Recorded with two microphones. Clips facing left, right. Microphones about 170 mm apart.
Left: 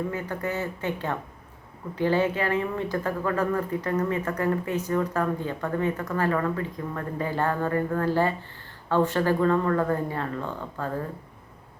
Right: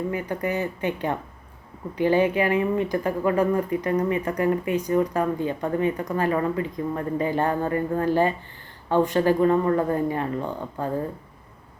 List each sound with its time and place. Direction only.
0.1 s speech: 15° right (ahead or behind)